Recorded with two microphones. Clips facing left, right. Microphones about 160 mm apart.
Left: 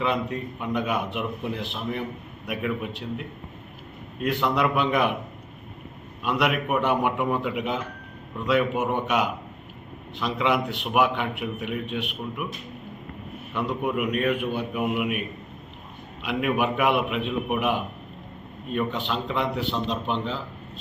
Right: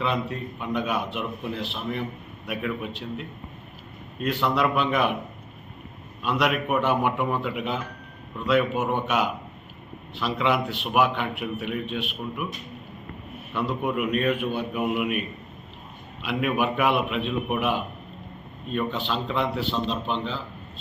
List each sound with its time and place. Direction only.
0.0 s a man's voice: 15° left (ahead or behind)
4.2 s a man's voice: 15° left (ahead or behind)
6.2 s a man's voice: 15° left (ahead or behind)
13.5 s a man's voice: 10° left (ahead or behind)
16.2 s a man's voice: 15° left (ahead or behind)